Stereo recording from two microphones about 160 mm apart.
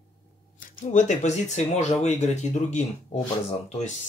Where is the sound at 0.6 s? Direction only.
50° left (ahead or behind).